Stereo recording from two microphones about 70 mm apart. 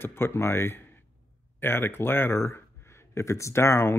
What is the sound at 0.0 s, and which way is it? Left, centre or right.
Speech, left.